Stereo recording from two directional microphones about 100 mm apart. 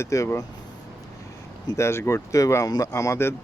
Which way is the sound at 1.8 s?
25° left (ahead or behind).